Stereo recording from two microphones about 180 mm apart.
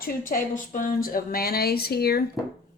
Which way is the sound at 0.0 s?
50° left (ahead or behind).